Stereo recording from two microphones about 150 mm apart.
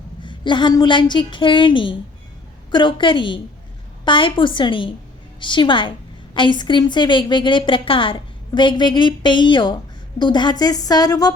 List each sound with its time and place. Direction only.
0.3 s a woman's voice: 30° left (ahead or behind)